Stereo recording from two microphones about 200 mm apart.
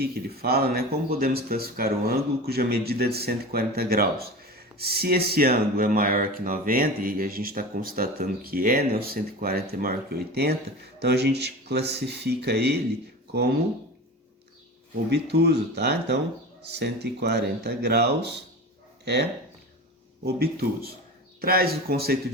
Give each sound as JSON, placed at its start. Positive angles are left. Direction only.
{"t": 0.0, "sound": "speech", "side_deg": -50}
{"t": 15.1, "sound": "speech", "side_deg": -55}
{"t": 20.2, "sound": "speech", "side_deg": -50}